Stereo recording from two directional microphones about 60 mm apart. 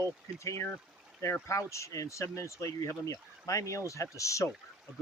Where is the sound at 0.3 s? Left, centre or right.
Left.